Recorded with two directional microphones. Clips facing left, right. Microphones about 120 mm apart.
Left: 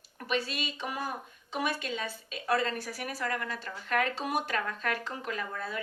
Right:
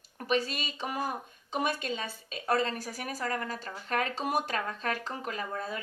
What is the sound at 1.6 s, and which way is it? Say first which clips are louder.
A woman's voice: right 1 dB; 40° right (ahead or behind).